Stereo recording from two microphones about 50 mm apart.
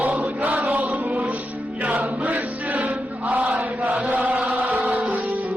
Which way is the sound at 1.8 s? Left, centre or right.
Right.